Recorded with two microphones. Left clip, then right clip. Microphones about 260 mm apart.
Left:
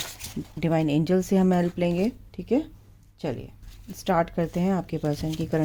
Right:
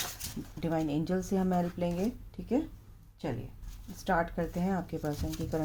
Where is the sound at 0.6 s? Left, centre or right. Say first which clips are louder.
Left 8 dB; left.